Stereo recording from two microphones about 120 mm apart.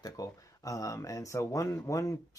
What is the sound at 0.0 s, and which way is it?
Speech, 30° left (ahead or behind).